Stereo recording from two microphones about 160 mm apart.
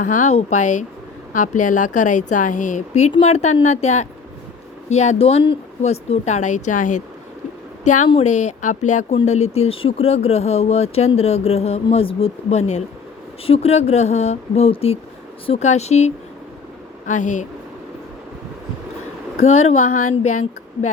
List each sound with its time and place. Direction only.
0.0 s a woman's voice: 50° left (ahead or behind)
8.2 s a woman's voice: 45° left (ahead or behind)
19.4 s speech: 40° left (ahead or behind)